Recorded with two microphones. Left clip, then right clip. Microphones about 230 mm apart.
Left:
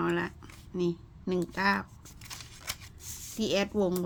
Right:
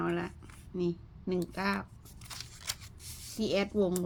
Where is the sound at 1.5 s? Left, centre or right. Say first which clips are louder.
Left 9 dB; centre.